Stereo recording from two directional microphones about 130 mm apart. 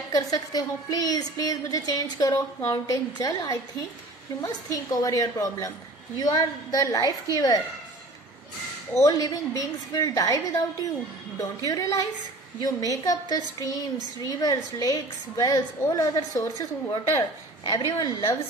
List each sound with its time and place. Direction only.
0.1 s a woman's voice: 30° left (ahead or behind)
8.9 s a woman's voice: 25° left (ahead or behind)